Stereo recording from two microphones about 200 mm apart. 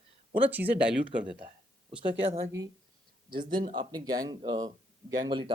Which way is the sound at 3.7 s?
20° right (ahead or behind).